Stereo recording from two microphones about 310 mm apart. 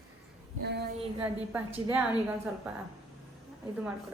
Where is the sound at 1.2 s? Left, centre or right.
Centre.